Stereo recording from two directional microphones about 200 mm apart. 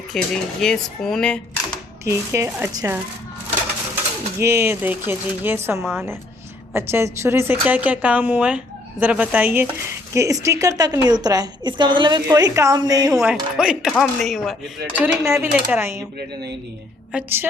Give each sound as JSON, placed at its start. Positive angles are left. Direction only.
{"t": 0.1, "sound": "speech", "side_deg": 0}
{"t": 2.0, "sound": "speech", "side_deg": -15}
{"t": 4.4, "sound": "a woman's voice", "side_deg": -10}
{"t": 13.1, "sound": "speech", "side_deg": -5}
{"t": 14.9, "sound": "speech", "side_deg": -10}
{"t": 16.1, "sound": "speech", "side_deg": -55}
{"t": 17.1, "sound": "speech", "side_deg": -10}